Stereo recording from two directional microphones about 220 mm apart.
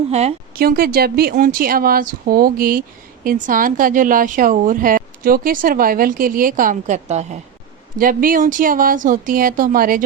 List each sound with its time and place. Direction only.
0.1 s speech: 30° right (ahead or behind)
0.5 s speech: 40° right (ahead or behind)